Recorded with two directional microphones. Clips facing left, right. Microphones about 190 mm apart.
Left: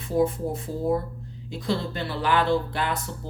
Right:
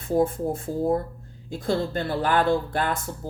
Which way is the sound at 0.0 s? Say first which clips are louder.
Right 1 dB; 50° right (ahead or behind).